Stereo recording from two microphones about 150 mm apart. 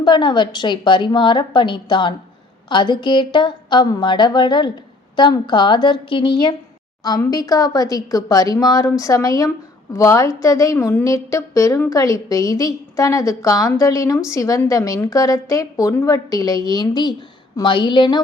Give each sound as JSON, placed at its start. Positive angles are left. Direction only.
{"t": 0.0, "sound": "a woman's voice", "side_deg": 30}